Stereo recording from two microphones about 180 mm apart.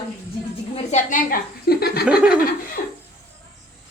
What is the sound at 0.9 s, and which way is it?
A woman's voice, 50° left (ahead or behind).